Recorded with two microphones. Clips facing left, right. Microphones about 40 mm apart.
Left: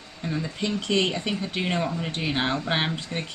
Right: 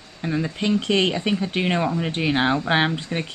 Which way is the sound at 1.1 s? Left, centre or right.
Centre.